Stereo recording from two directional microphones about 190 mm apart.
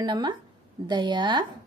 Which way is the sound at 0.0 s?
25° right (ahead or behind).